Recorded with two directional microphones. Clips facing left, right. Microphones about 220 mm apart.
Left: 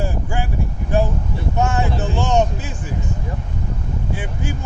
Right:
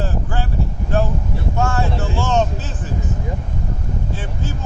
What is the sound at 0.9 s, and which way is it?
Vehicle, 15° left (ahead or behind).